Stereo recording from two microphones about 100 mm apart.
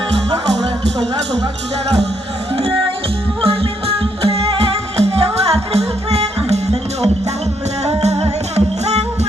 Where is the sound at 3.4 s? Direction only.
70° right (ahead or behind).